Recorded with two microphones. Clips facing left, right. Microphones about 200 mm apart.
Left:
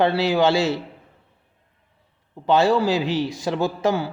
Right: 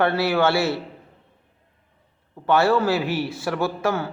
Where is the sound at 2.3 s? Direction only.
15° left (ahead or behind).